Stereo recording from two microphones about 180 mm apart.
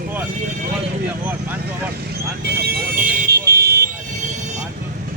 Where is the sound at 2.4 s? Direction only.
60° right (ahead or behind).